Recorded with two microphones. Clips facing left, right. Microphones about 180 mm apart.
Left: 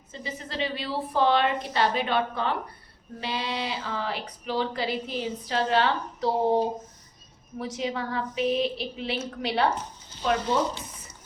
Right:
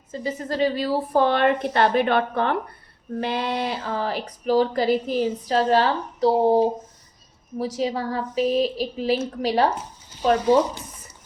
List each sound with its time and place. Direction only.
0.1 s a woman's voice: 45° right (ahead or behind)